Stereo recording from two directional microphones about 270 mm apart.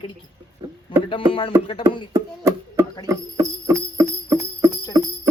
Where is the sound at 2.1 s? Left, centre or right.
Centre.